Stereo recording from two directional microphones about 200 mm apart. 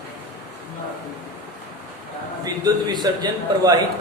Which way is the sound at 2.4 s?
20° right (ahead or behind).